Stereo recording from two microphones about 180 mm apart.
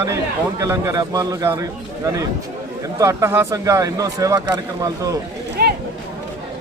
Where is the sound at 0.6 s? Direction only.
15° right (ahead or behind).